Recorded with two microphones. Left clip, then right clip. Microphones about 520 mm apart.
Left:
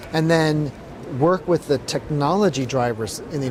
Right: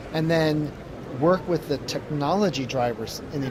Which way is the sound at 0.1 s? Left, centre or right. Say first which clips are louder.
Left 4 dB; left.